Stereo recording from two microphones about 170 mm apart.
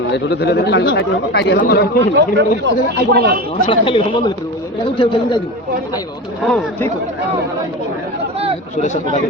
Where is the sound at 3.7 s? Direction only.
30° left (ahead or behind).